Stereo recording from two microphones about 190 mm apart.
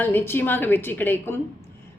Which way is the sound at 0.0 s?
10° left (ahead or behind).